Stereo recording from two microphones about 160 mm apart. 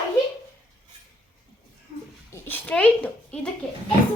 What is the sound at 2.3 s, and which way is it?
A woman's voice, 10° left (ahead or behind).